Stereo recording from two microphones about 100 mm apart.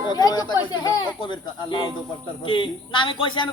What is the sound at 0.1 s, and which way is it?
Speech, 40° left (ahead or behind).